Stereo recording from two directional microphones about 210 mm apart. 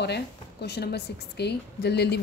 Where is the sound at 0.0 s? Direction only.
50° left (ahead or behind).